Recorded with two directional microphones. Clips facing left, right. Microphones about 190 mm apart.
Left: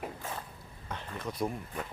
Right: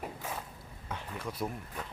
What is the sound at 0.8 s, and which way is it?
Speech, 10° right (ahead or behind).